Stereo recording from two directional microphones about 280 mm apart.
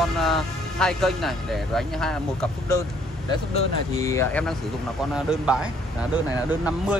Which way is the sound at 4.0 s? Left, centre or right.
Centre.